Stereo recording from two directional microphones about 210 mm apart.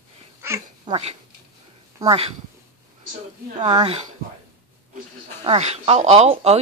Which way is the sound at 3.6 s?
20° right (ahead or behind).